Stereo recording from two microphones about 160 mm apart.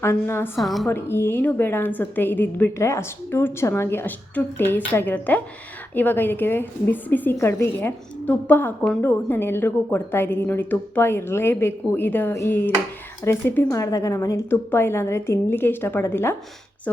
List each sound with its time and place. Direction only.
0.0 s a woman's voice: 15° left (ahead or behind)
0.5 s a woman's voice: centre (ahead or behind)
0.9 s a woman's voice: 15° left (ahead or behind)